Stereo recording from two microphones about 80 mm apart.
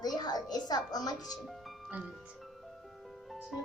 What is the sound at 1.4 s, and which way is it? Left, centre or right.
Music, centre.